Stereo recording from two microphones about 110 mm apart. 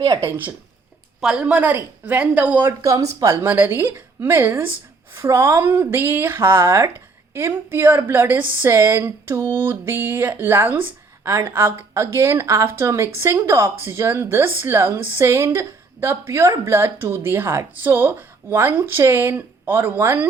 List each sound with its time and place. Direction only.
0.2 s speech: 20° right (ahead or behind)
1.2 s a woman's voice: 5° right (ahead or behind)
2.8 s speech: 30° right (ahead or behind)